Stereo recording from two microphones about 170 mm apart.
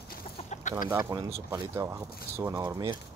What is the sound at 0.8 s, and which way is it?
Speech, 20° right (ahead or behind).